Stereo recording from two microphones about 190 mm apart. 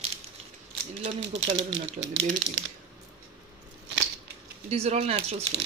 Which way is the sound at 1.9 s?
80° right.